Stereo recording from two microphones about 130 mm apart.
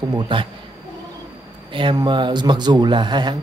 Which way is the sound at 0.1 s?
40° right (ahead or behind).